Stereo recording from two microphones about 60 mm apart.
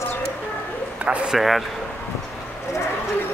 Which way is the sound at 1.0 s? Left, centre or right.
Right.